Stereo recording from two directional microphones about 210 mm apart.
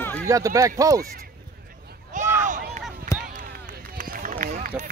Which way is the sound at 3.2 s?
40° right (ahead or behind).